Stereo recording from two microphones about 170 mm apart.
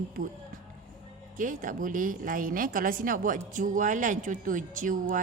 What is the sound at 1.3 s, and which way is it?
A woman's voice, 50° right (ahead or behind).